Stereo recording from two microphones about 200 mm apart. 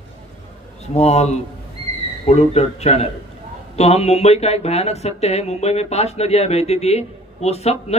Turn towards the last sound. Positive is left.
turn(degrees=30)  # may be behind; listen again after turning